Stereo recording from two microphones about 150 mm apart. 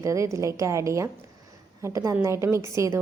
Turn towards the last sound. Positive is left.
turn(degrees=-20)  # may be behind; listen again after turning